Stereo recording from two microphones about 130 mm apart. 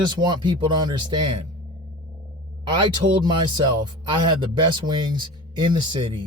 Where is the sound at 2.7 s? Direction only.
35° right (ahead or behind).